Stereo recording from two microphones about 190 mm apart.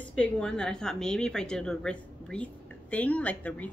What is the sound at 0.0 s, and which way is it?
A woman's voice, 5° left (ahead or behind).